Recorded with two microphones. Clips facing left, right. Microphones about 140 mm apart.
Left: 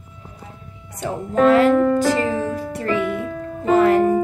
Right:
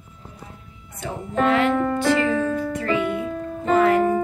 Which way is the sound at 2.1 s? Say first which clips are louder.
Even; 35° left (ahead or behind).